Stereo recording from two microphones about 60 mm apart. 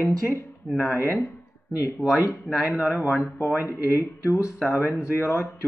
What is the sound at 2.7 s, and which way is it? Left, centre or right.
Speech, right.